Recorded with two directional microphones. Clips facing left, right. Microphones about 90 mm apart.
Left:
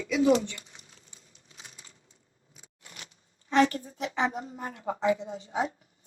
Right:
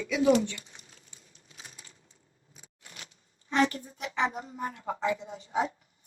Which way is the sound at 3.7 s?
35° left (ahead or behind).